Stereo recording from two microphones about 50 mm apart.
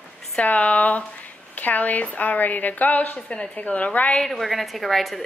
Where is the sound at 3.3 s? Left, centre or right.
Centre.